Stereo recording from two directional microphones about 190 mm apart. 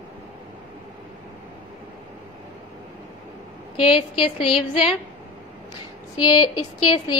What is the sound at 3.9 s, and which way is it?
A woman's voice, 25° left (ahead or behind).